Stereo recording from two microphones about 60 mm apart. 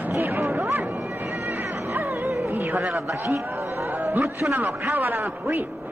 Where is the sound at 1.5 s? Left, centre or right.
Right.